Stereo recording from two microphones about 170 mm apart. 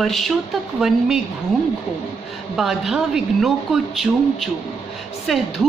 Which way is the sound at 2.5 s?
5° right (ahead or behind).